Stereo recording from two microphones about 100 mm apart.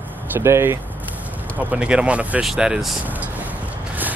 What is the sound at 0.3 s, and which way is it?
Speech, 25° right (ahead or behind).